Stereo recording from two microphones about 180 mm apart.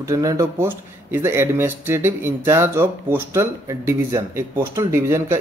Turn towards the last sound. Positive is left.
turn(degrees=-15)  # may be behind; listen again after turning